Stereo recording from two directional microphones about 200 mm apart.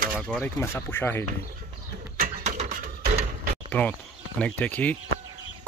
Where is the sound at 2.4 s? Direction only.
35° right (ahead or behind).